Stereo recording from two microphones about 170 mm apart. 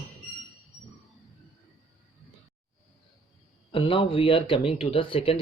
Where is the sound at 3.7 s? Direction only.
30° left (ahead or behind).